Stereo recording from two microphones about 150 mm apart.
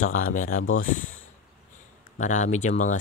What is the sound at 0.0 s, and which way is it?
Speech, 65° left (ahead or behind).